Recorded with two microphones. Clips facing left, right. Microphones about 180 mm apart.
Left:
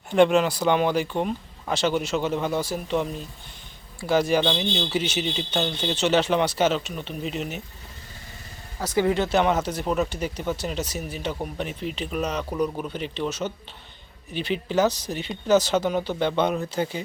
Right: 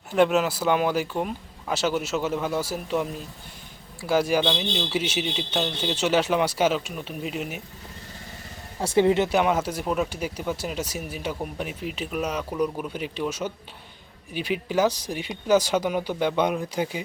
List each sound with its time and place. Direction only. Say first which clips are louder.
0.1 s speech: left 2 dB; 5° right (ahead or behind)
8.8 s speech: right 3 dB; 25° right (ahead or behind)
9.3 s speech: left 1 dB; 10° right (ahead or behind)